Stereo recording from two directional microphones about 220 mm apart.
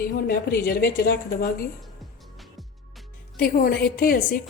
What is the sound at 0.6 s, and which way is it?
Speech, 40° left (ahead or behind).